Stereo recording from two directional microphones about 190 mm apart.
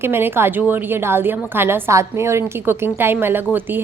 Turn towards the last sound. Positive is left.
turn(degrees=-10)  # may be behind; listen again after turning